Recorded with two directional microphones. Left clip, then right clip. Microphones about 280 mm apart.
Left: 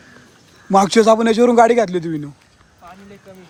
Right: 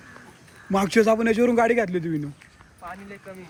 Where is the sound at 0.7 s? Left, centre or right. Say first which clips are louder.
Left 8 dB; centre.